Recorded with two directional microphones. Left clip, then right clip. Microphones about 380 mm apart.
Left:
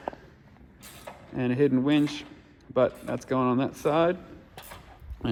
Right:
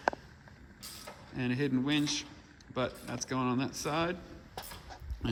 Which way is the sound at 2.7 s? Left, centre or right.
Centre.